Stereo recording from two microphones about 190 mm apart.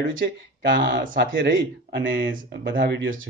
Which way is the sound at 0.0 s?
80° right.